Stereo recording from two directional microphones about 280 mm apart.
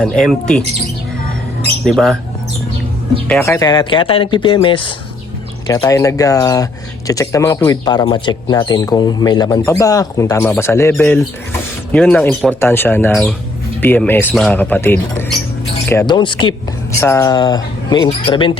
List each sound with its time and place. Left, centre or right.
0.0 s speech: centre
1.8 s speech: centre
3.2 s speech: centre